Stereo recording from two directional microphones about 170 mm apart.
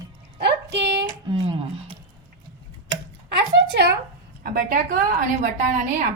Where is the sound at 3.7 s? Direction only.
75° right (ahead or behind).